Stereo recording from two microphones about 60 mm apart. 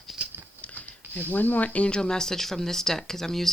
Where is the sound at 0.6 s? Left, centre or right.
Left.